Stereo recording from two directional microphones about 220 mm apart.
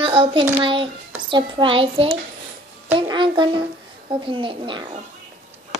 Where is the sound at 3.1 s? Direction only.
20° right (ahead or behind).